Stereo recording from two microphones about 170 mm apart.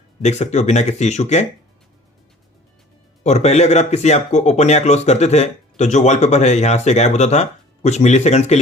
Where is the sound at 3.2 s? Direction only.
40° left (ahead or behind).